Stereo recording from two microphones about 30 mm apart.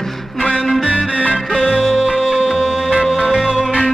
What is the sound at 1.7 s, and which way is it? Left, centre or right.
Music, centre.